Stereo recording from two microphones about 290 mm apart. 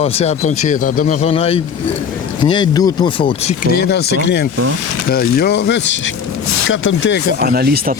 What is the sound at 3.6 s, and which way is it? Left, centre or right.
Speech, left.